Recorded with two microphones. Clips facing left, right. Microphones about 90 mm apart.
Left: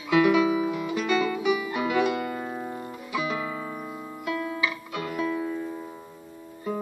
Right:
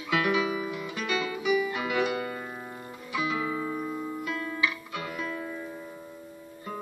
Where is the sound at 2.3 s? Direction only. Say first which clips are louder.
Left 6 dB; 15° left (ahead or behind).